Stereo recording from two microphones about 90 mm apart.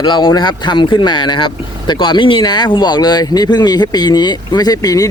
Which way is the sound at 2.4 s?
55° left (ahead or behind).